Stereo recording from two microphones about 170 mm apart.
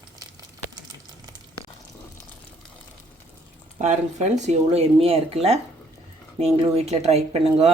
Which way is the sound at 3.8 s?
45° right (ahead or behind).